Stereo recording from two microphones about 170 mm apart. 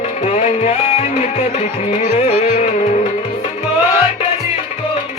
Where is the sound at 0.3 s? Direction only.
40° left (ahead or behind).